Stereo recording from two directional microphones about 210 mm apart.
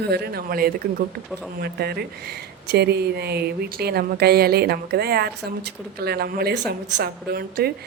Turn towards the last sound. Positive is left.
turn(degrees=-45)  # may be behind; listen again after turning